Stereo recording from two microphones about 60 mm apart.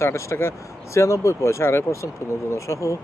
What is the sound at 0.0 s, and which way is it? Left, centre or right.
Speech, left.